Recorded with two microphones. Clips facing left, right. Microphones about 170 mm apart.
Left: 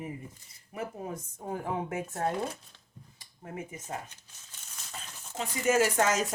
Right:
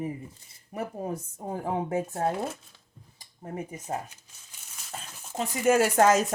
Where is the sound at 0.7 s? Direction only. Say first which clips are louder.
Right 4 dB; 35° right (ahead or behind).